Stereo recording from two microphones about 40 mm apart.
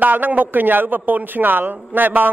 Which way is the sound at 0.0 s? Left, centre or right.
Right.